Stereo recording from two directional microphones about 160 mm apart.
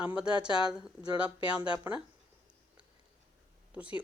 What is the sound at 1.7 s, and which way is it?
Speech, 10° right (ahead or behind).